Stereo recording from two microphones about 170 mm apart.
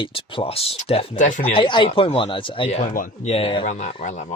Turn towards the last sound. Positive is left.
turn(degrees=45)  # may be behind; listen again after turning